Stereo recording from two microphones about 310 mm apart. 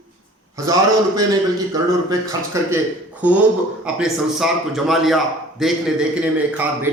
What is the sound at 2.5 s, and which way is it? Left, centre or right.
A man's voice, centre.